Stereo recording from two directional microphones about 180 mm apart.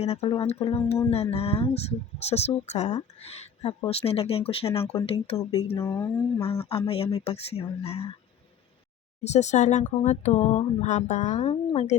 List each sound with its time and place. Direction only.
0.0 s speech: 35° left (ahead or behind)
5.7 s speech: 15° left (ahead or behind)
6.4 s speech: 35° left (ahead or behind)
9.2 s speech: 40° left (ahead or behind)